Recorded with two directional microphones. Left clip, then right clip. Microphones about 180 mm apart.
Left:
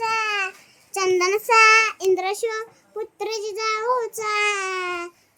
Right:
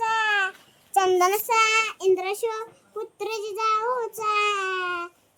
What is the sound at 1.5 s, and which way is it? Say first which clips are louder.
Child singing: left 11 dB; 10° left (ahead or behind).